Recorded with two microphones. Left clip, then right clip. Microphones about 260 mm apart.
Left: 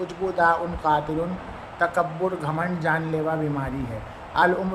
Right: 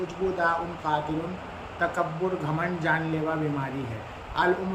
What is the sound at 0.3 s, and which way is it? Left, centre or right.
Speech, left.